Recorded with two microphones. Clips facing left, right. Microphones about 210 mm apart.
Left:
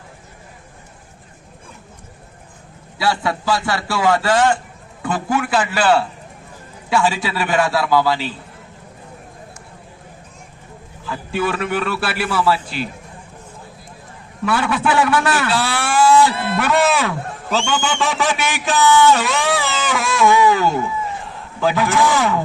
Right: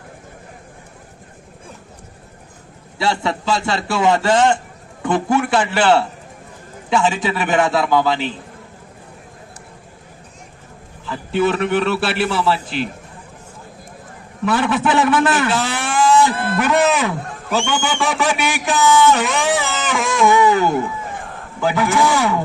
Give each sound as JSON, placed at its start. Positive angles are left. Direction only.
{"t": 3.0, "sound": "a man's voice", "side_deg": -25}
{"t": 11.1, "sound": "a man's voice", "side_deg": -25}
{"t": 14.4, "sound": "a man's voice", "side_deg": -20}
{"t": 16.3, "sound": "speech", "side_deg": -50}
{"t": 16.6, "sound": "speech", "side_deg": -15}
{"t": 20.8, "sound": "a sound", "side_deg": -50}
{"t": 21.6, "sound": "speech", "side_deg": -15}